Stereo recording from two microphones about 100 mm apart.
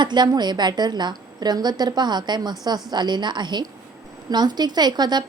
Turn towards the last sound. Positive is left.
turn(degrees=-45)  # may be behind; listen again after turning